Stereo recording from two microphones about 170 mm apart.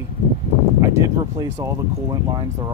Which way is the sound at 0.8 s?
20° right (ahead or behind).